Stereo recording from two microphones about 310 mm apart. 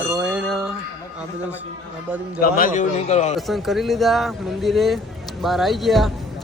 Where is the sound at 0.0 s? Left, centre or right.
Centre.